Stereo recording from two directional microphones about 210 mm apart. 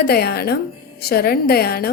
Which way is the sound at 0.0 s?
50° left (ahead or behind).